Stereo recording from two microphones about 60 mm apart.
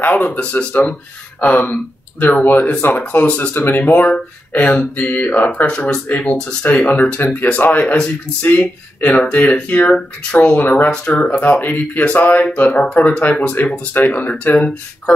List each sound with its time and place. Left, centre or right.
0.1 s speech: left
1.6 s speech: left
7.8 s speech: centre